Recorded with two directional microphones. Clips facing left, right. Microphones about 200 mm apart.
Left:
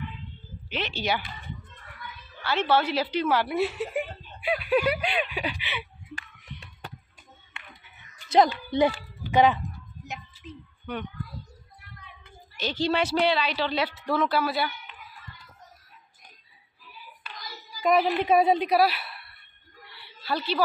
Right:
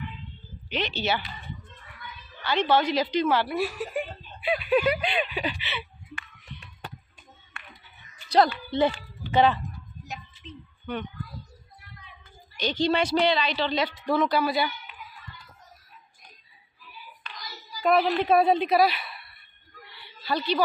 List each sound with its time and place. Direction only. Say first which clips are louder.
0.7 s a woman's voice: right 1 dB; 5° left (ahead or behind)
2.4 s a woman's voice: right 1 dB; 5° left (ahead or behind)
3.4 s speech: left 2 dB; 25° left (ahead or behind)
4.4 s speech: right 1 dB; 10° left (ahead or behind)
8.3 s a woman's voice: left 1 dB; 15° left (ahead or behind)
12.5 s a woman's voice: right 1 dB; 5° left (ahead or behind)
17.3 s child singing: left 1 dB; 10° left (ahead or behind)
17.9 s a woman's voice: even; 10° left (ahead or behind)
20.0 s a sound: right 1 dB; 5° left (ahead or behind)